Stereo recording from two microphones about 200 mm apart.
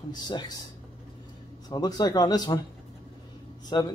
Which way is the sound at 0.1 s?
20° left (ahead or behind).